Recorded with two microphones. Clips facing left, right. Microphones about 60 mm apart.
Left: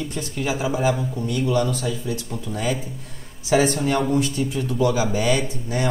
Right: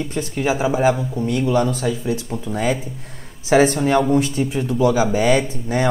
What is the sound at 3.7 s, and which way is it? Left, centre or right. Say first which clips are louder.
Speech: right 5 dB; right.